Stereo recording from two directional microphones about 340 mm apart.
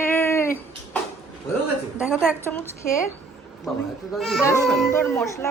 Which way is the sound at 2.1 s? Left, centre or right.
Centre.